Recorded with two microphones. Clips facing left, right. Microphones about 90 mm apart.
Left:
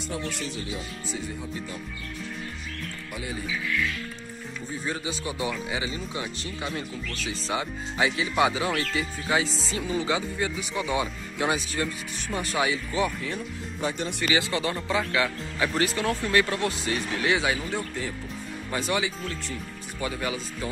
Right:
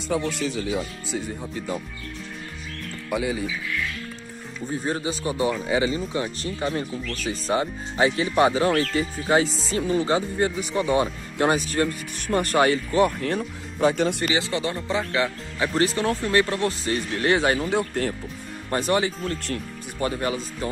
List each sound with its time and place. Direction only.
1.1 s speech: 60° right (ahead or behind)
3.1 s speech: 90° right
4.8 s speech: 35° right (ahead or behind); by 14.1 s 75° right (ahead or behind)
14.2 s speech: 25° right (ahead or behind); by 17.7 s 50° right (ahead or behind)
17.7 s speech: 65° right (ahead or behind)
18.7 s speech: 45° right (ahead or behind)